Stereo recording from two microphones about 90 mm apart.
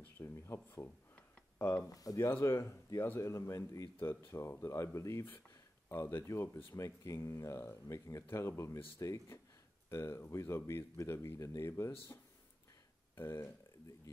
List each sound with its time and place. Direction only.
0.2 s speech: 30° left (ahead or behind)
1.6 s speech: 20° left (ahead or behind)
1.9 s speech: 40° left (ahead or behind)
2.2 s speech: 30° left (ahead or behind)
13.1 s speech: 25° left (ahead or behind)